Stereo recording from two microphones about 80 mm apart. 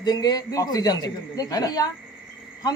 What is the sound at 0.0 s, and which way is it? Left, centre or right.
A man's voice, left.